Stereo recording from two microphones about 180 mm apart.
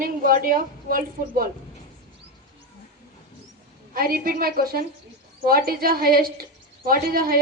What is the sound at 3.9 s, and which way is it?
A woman's voice, 55° right (ahead or behind).